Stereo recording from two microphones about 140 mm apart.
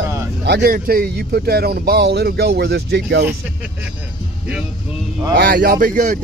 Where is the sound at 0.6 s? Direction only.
90° right.